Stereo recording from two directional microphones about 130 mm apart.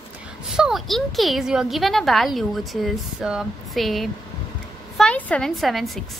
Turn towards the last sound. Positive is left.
turn(degrees=0)  # may be behind; listen again after turning